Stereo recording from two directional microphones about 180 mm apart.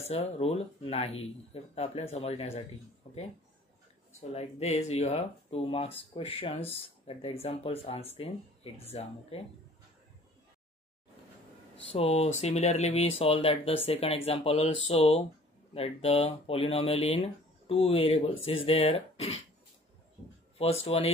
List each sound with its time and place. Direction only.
0.0 s speech: 35° left (ahead or behind)
11.9 s speech: 30° left (ahead or behind)
20.5 s speech: 35° left (ahead or behind)